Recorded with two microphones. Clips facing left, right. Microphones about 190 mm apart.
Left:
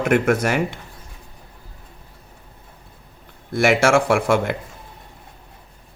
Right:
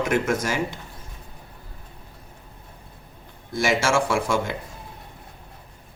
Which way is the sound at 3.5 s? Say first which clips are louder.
Left 6 dB; 60° left (ahead or behind).